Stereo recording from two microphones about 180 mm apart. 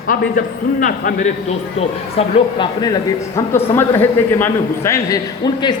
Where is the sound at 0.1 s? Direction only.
50° left (ahead or behind).